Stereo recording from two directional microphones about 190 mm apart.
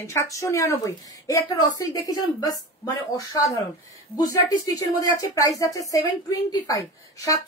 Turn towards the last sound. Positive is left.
turn(degrees=15)  # may be behind; listen again after turning